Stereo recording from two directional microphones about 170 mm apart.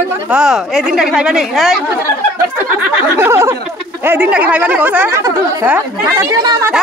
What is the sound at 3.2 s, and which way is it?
Speech, 15° right (ahead or behind).